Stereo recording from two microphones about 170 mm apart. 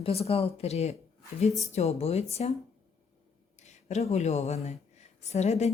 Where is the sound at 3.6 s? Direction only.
40° left (ahead or behind).